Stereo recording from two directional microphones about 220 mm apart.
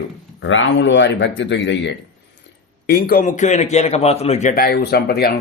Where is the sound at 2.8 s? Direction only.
45° left (ahead or behind).